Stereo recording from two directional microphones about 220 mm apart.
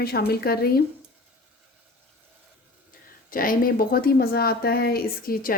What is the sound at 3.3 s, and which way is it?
A woman's voice, 40° left (ahead or behind).